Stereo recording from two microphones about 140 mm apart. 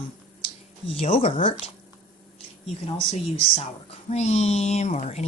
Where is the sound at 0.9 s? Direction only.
45° left (ahead or behind).